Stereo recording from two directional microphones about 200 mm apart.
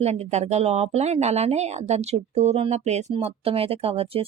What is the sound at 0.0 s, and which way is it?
A woman's voice, 30° right (ahead or behind).